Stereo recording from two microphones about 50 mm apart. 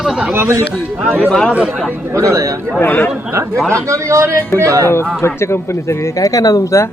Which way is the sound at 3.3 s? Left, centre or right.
Right.